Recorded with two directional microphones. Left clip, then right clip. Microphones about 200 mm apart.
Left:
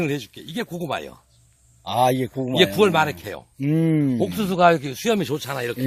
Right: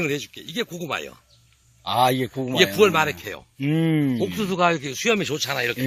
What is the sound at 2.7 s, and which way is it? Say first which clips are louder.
Speech: even; 50° left (ahead or behind).